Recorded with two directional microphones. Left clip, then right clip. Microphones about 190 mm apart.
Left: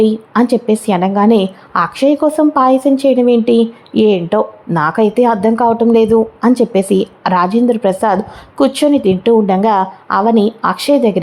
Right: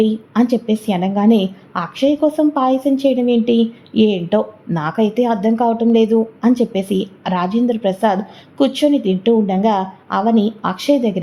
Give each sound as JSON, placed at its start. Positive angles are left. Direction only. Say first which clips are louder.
{"t": 0.0, "sound": "a woman's voice", "louder": "left 5 dB", "side_deg": 15}